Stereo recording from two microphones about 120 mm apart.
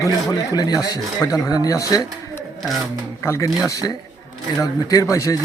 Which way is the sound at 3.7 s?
30° left (ahead or behind).